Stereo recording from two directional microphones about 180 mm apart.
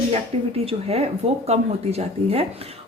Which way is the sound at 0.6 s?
35° right (ahead or behind).